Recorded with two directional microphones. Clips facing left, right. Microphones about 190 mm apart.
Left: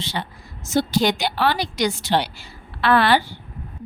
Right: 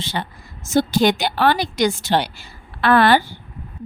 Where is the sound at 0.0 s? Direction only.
50° right (ahead or behind).